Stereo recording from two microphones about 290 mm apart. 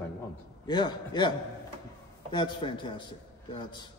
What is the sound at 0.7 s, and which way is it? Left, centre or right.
Speech, centre.